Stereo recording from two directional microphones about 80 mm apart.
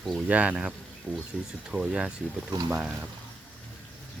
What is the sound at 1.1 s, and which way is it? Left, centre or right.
Speech, centre.